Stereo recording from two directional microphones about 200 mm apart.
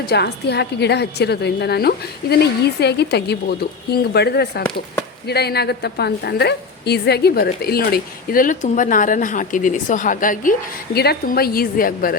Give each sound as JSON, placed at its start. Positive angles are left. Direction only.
{"t": 0.1, "sound": "a woman's voice", "side_deg": 55}